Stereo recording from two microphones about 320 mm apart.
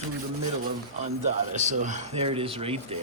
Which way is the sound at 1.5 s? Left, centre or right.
Right.